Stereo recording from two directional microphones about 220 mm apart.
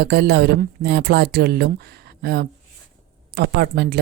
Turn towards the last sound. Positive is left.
turn(degrees=-50)  # may be behind; listen again after turning